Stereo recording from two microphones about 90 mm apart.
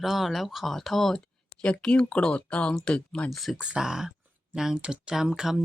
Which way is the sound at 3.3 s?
Centre (ahead or behind).